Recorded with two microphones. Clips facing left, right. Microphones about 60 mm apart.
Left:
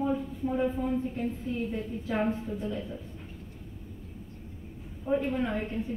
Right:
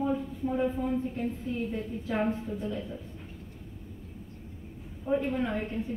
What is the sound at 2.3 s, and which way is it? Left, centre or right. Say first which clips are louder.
Speech: even; centre.